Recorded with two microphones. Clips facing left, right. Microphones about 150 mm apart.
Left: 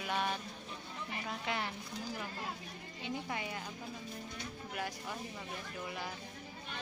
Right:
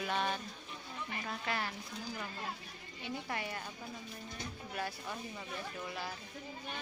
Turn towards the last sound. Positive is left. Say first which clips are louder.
# right 1 dB
turn(degrees=15)  # may be behind; listen again after turning